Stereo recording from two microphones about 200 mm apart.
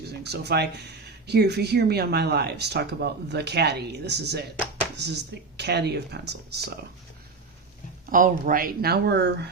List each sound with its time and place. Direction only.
0.1 s speech: 55° right (ahead or behind)
8.1 s speech: 40° right (ahead or behind)